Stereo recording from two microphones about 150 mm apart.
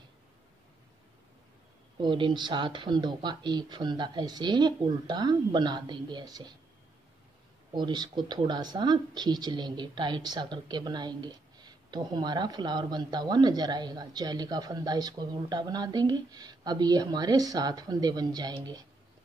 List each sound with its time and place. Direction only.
2.0 s a woman's voice: 35° right (ahead or behind)
7.7 s a woman's voice: 30° right (ahead or behind)